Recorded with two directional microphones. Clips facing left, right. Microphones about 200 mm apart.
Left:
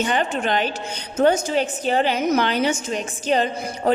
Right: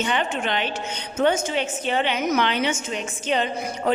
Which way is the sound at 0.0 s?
40° left (ahead or behind).